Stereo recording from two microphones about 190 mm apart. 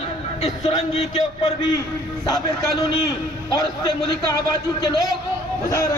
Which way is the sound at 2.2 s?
20° left (ahead or behind).